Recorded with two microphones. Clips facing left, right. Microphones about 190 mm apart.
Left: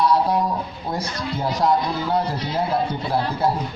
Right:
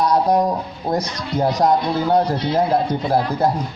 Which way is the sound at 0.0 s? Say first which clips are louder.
Right 3 dB; 45° right (ahead or behind).